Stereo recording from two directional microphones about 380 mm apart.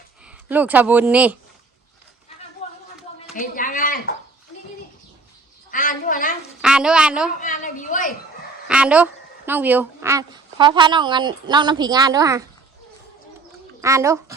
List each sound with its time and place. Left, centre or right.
0.3 s speech: centre
2.6 s a sound: centre
3.3 s speech: left
5.7 s speech: left
6.6 s speech: centre
7.3 s speech: centre
8.6 s a woman's voice: centre
13.8 s a woman's voice: centre